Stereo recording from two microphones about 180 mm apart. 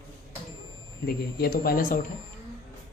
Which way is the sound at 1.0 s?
55° left (ahead or behind).